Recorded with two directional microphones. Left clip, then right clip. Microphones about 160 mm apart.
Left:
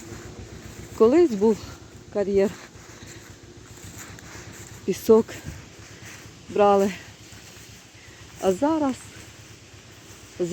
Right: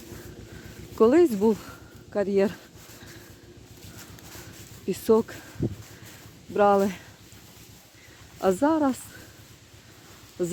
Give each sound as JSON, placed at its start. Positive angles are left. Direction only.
{"t": 0.9, "sound": "speech", "side_deg": -20}
{"t": 4.9, "sound": "speech", "side_deg": 0}
{"t": 6.5, "sound": "speech", "side_deg": -10}
{"t": 8.4, "sound": "speech", "side_deg": -30}